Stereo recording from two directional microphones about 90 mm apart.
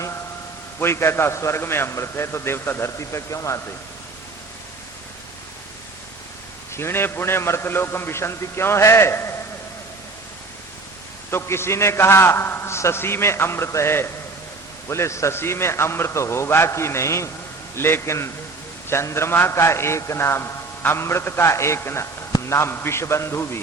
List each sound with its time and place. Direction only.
0.8 s a man's voice: 30° left (ahead or behind)
6.7 s a man's voice: 30° left (ahead or behind)
11.3 s a man's voice: 30° left (ahead or behind)